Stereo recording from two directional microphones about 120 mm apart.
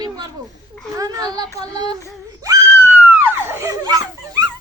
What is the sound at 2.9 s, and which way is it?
Laughter, 20° right (ahead or behind).